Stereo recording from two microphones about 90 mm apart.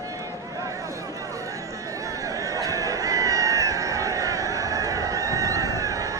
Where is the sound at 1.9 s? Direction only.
40° right (ahead or behind).